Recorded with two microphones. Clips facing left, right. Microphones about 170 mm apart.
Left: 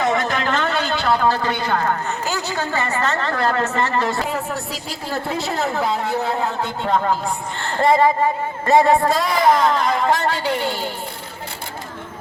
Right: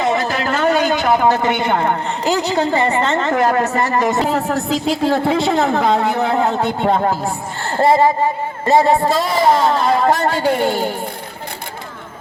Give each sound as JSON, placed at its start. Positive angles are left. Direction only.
{"t": 0.0, "sound": "a sound", "side_deg": -30}
{"t": 0.7, "sound": "a man's voice", "side_deg": -15}
{"t": 4.3, "sound": "a woman's voice", "side_deg": -85}
{"t": 7.8, "sound": "speech", "side_deg": -30}
{"t": 8.7, "sound": "a man's voice", "side_deg": 0}
{"t": 9.1, "sound": "speech", "side_deg": -25}